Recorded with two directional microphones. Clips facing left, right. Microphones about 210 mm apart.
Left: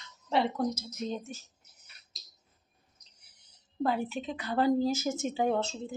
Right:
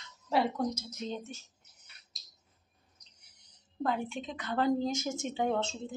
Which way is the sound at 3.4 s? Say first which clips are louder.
Left 3 dB; 5° left (ahead or behind).